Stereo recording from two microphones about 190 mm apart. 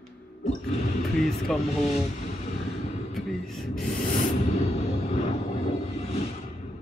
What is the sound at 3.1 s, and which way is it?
Music, centre (ahead or behind).